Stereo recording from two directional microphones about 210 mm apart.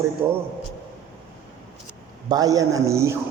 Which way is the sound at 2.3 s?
15° right (ahead or behind).